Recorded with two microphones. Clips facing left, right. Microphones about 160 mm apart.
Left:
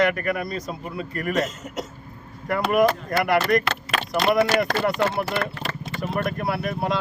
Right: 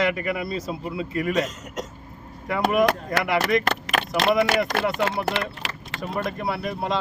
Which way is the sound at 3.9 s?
90° right.